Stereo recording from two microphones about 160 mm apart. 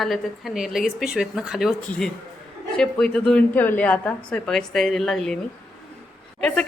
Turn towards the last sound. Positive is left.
turn(degrees=5)  # may be behind; listen again after turning